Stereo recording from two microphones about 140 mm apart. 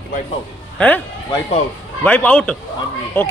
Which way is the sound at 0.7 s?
10° left (ahead or behind).